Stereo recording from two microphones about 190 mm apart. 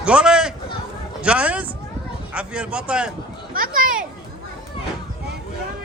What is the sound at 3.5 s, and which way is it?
Speech, 45° right (ahead or behind).